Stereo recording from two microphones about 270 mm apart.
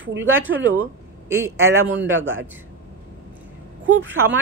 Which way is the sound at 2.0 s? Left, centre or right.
Right.